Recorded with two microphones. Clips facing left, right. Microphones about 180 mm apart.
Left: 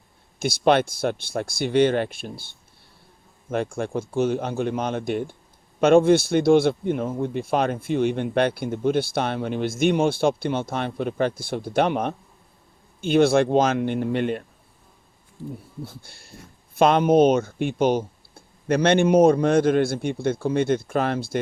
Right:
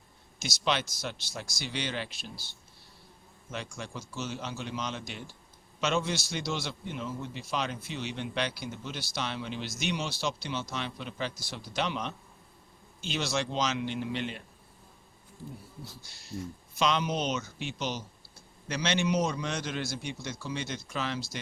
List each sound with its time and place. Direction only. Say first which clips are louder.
0.3 s speech: left 12 dB; 55° left (ahead or behind)
15.8 s speech: left 9 dB; 55° left (ahead or behind)